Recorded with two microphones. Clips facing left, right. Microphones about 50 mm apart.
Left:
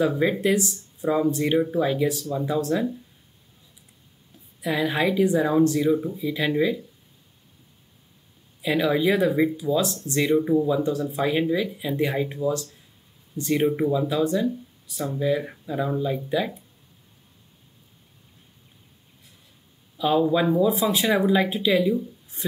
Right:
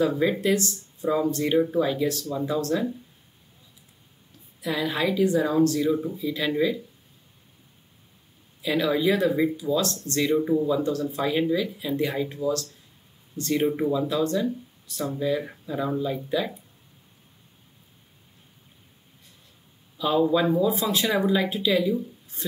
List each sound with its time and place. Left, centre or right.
0.0 s speech: centre
4.6 s speech: centre
8.6 s speech: centre
11.9 s speech: centre
12.2 s speech: centre
20.0 s speech: centre